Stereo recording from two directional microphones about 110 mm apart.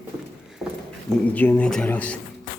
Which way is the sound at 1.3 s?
15° left (ahead or behind).